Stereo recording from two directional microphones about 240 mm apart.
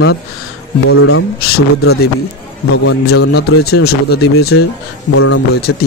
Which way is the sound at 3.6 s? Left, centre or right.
Left.